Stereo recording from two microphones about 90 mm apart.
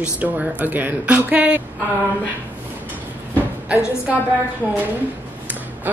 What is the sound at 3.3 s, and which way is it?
Speech, 15° right (ahead or behind).